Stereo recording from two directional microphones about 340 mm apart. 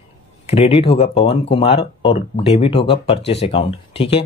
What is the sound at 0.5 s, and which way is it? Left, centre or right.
Speech, centre.